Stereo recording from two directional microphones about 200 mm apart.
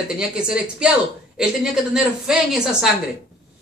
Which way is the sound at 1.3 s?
5° right (ahead or behind).